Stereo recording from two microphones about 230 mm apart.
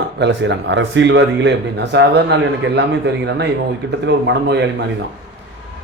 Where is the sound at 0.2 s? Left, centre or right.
Right.